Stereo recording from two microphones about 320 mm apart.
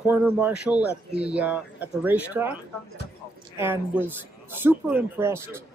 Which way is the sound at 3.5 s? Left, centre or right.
Centre.